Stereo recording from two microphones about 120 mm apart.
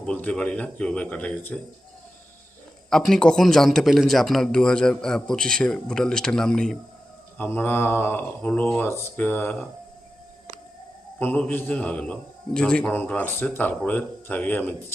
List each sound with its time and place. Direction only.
0.0 s speech: 10° left (ahead or behind)
2.9 s a man's voice: 5° left (ahead or behind)
7.3 s speech: 15° left (ahead or behind)
11.2 s speech: 15° left (ahead or behind)